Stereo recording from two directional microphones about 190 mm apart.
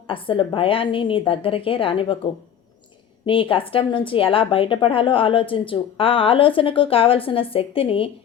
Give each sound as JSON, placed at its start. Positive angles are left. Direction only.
{"t": 0.1, "sound": "a woman's voice", "side_deg": 25}
{"t": 3.2, "sound": "a woman's voice", "side_deg": 25}